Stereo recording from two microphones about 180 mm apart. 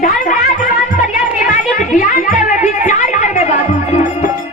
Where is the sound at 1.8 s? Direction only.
45° left (ahead or behind).